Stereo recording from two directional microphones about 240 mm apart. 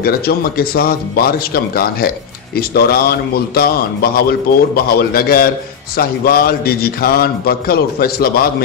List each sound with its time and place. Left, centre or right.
0.0 s speech: left